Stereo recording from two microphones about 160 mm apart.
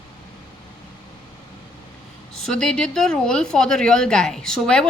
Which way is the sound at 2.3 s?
Centre (ahead or behind).